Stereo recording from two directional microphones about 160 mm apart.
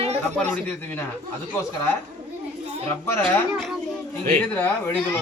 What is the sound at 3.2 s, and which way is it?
Speech, 15° left (ahead or behind).